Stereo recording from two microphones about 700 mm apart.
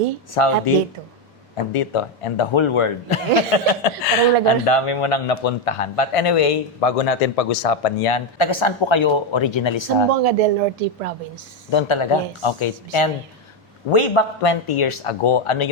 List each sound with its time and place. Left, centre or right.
0.3 s a man's voice: left
1.7 s a man's voice: left
10.1 s speech: right
11.7 s a man's voice: left